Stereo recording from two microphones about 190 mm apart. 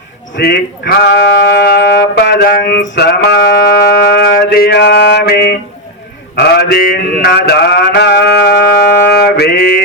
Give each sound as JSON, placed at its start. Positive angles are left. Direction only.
{"t": 0.3, "sound": "speech", "side_deg": 55}
{"t": 6.3, "sound": "mantra", "side_deg": 60}